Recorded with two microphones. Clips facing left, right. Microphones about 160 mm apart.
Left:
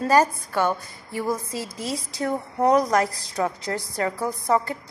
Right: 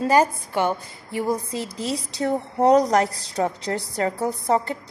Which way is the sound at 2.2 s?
35° right (ahead or behind).